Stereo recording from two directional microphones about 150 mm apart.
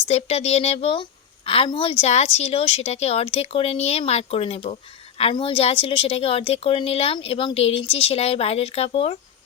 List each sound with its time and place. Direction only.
0.1 s a woman's voice: 45° left (ahead or behind)